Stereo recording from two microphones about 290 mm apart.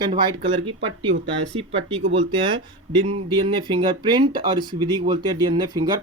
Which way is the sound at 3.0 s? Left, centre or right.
Centre.